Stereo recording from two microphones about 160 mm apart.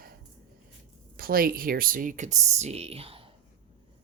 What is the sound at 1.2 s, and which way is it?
Speech, 65° right (ahead or behind).